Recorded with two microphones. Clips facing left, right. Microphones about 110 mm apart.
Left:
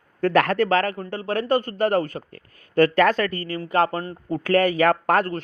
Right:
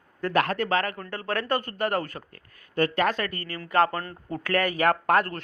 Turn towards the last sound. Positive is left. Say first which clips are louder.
# left 3 dB
turn(degrees=35)  # may be behind; listen again after turning